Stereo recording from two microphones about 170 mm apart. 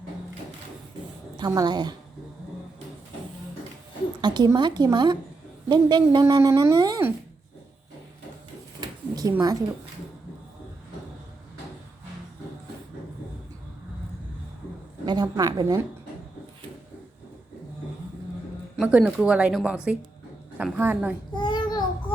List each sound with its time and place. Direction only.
1.4 s a woman's voice: 20° right (ahead or behind)
4.2 s a woman's voice: 25° right (ahead or behind)
8.8 s a sound: 20° right (ahead or behind)
15.0 s a woman's voice: 25° right (ahead or behind)
18.8 s a woman's voice: 5° right (ahead or behind)
21.3 s child singing: 25° left (ahead or behind)